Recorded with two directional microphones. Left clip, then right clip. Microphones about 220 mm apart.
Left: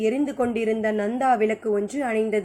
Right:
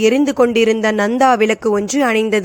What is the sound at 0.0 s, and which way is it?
A man's voice, 50° right (ahead or behind).